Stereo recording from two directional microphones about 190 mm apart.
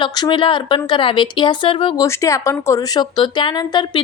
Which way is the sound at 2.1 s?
15° left (ahead or behind).